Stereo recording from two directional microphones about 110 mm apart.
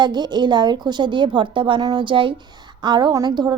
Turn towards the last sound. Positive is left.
turn(degrees=-40)  # may be behind; listen again after turning